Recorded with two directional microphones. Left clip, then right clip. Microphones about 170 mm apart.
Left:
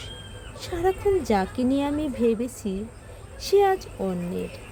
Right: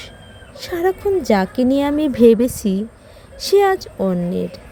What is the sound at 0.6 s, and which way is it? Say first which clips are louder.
Speech: right 5 dB; 35° right (ahead or behind).